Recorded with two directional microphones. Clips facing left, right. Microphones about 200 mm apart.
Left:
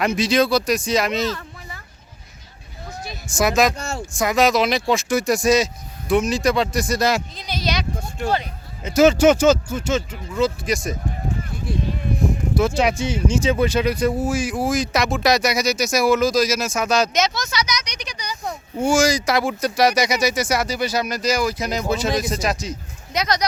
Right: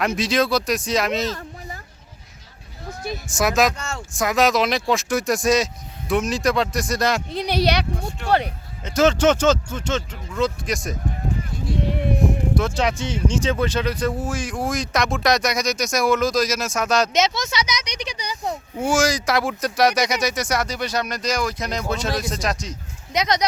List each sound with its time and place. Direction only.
0.0 s speech: centre (ahead or behind)
1.3 s a sound: 40° right (ahead or behind)
3.2 s speech: centre (ahead or behind)
3.8 s speech: 30° left (ahead or behind)
4.1 s speech: centre (ahead or behind)
7.3 s speech: 65° right (ahead or behind)
8.8 s speech: 10° left (ahead or behind)
12.5 s speech: 10° left (ahead or behind)
17.1 s speech: 25° right (ahead or behind)
18.8 s speech: centre (ahead or behind)
23.1 s speech: 20° right (ahead or behind)